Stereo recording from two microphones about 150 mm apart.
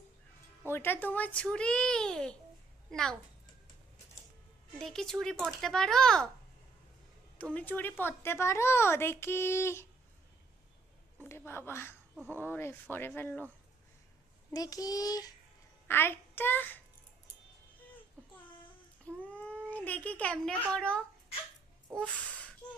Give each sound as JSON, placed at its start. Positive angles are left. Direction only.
{"t": 0.7, "sound": "a woman's voice", "side_deg": 15}
{"t": 4.8, "sound": "speech", "side_deg": 5}
{"t": 7.3, "sound": "a woman's voice", "side_deg": 10}
{"t": 11.2, "sound": "a woman's voice", "side_deg": 15}
{"t": 14.5, "sound": "child singing", "side_deg": 25}
{"t": 15.9, "sound": "a child's voice", "side_deg": 15}
{"t": 19.2, "sound": "a sound", "side_deg": 10}
{"t": 19.7, "sound": "a woman's voice", "side_deg": 10}
{"t": 22.3, "sound": "a sound", "side_deg": 10}